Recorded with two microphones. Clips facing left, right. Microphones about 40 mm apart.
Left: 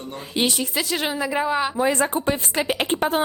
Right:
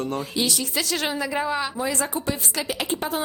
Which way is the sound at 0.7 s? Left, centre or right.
Centre.